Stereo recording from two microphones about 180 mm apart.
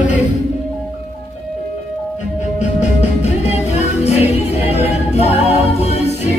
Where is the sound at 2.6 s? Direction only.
40° left (ahead or behind).